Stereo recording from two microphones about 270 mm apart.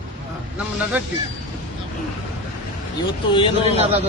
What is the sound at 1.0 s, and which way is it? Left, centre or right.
Speech, centre.